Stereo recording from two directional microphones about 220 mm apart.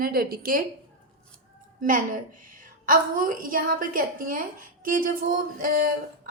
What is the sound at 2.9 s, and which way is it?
A woman's voice, 40° right (ahead or behind).